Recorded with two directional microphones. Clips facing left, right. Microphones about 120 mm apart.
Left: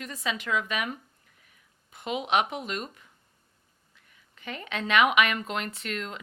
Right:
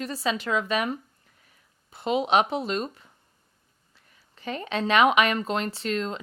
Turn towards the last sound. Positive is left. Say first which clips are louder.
# right 7 dB
turn(degrees=-30)  # may be behind; listen again after turning